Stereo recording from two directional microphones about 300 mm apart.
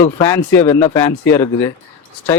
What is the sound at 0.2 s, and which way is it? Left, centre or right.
Speech, centre.